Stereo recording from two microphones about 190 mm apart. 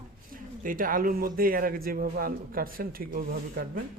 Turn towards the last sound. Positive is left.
turn(degrees=-50)  # may be behind; listen again after turning